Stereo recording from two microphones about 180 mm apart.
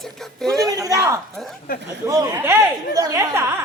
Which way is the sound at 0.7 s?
20° right (ahead or behind).